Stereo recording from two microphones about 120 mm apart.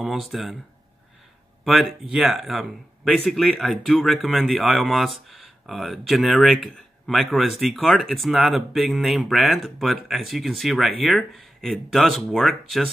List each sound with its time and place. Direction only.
0.0 s speech: centre (ahead or behind)
1.6 s speech: centre (ahead or behind)